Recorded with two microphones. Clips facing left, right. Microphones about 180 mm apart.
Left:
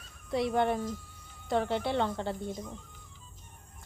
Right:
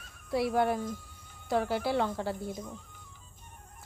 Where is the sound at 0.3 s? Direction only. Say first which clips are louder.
Even; 5° right (ahead or behind).